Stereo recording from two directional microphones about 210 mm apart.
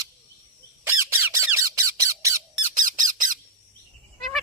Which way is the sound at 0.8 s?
10° right (ahead or behind).